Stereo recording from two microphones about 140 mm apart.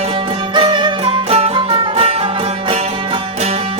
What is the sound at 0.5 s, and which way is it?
Music, 35° right (ahead or behind).